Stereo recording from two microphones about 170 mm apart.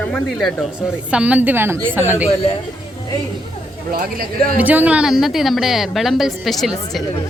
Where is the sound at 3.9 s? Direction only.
60° right (ahead or behind).